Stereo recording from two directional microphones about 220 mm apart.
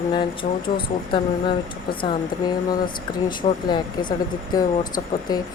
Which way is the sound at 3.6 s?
20° left (ahead or behind).